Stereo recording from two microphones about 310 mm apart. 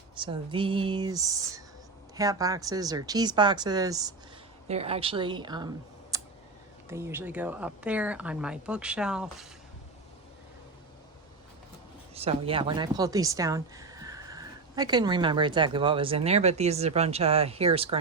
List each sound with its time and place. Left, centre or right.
0.2 s a woman's voice: centre
12.1 s a woman's voice: centre